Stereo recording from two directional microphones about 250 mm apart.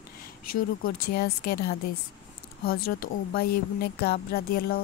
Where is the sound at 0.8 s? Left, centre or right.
Left.